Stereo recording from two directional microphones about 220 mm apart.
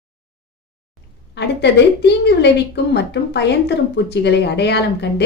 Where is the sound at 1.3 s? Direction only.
50° left (ahead or behind).